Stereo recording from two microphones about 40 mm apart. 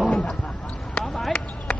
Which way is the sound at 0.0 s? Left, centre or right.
Left.